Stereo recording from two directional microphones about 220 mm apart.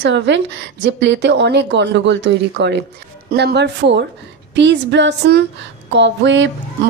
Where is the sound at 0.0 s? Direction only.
55° right (ahead or behind).